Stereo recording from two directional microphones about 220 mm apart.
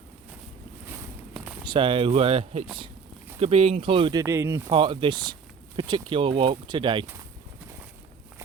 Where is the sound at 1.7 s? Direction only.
25° right (ahead or behind).